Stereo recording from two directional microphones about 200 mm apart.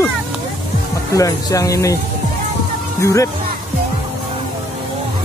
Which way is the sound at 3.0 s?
15° left (ahead or behind).